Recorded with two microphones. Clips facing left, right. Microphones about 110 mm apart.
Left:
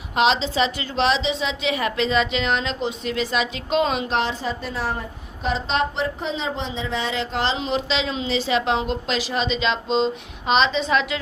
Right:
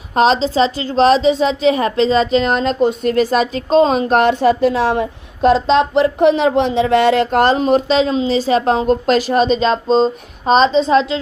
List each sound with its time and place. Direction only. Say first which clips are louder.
0.1 s a woman's voice: right 6 dB; 40° right (ahead or behind)